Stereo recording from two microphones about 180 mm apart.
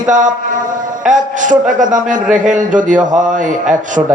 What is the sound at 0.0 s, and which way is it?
A man's voice, 45° right (ahead or behind).